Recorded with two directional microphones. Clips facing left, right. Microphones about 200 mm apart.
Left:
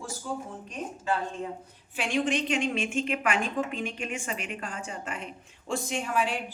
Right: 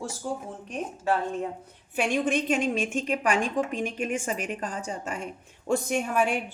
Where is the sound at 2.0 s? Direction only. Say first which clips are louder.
Right 2 dB; 50° right (ahead or behind).